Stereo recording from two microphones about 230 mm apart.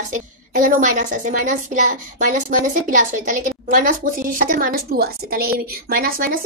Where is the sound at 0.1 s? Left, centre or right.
Right.